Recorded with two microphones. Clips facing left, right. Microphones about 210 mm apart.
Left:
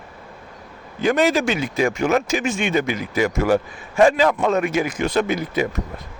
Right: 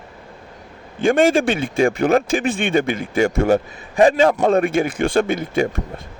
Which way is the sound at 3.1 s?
30° right (ahead or behind).